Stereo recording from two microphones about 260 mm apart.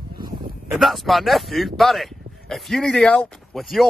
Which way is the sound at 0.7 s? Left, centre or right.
Centre.